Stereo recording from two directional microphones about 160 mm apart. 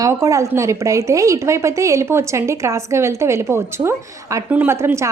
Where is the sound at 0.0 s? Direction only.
20° right (ahead or behind).